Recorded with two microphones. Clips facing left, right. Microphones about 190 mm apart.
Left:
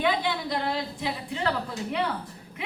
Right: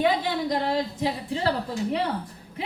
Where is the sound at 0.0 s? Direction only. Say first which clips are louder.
Right 3 dB; 40° right (ahead or behind).